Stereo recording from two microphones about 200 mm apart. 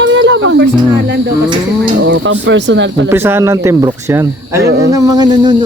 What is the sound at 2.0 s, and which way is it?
Speech, 65° right (ahead or behind).